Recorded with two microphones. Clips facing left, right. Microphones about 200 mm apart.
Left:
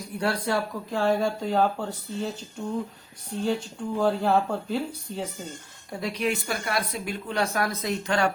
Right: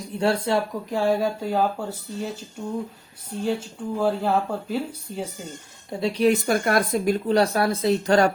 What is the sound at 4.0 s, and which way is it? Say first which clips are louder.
Speech: even; 5° right (ahead or behind).